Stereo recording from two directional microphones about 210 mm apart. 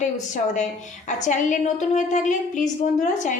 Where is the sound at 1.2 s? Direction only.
35° left (ahead or behind).